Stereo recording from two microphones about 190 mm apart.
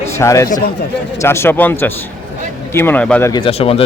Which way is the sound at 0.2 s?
15° left (ahead or behind).